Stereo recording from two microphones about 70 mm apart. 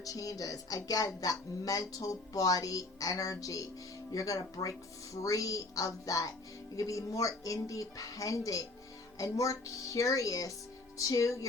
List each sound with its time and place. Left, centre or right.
0.0 s speech: left